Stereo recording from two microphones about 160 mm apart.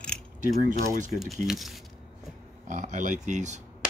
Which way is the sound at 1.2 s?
Centre (ahead or behind).